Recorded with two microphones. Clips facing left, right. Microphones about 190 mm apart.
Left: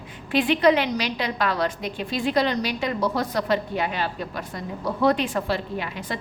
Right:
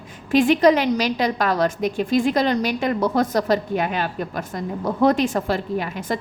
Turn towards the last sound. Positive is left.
turn(degrees=-45)  # may be behind; listen again after turning